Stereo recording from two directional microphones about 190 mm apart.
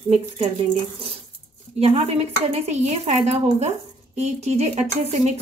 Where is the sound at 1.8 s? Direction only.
30° right (ahead or behind).